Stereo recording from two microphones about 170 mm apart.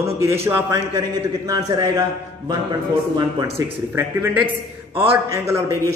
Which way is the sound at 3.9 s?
10° right (ahead or behind).